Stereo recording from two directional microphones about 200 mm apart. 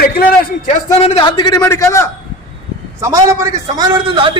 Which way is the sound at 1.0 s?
25° left (ahead or behind).